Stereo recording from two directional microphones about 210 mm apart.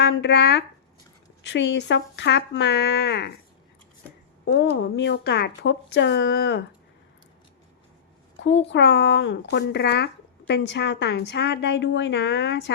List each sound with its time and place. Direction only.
0.0 s speech: 55° left (ahead or behind)
4.4 s speech: 55° left (ahead or behind)
8.4 s speech: 60° left (ahead or behind)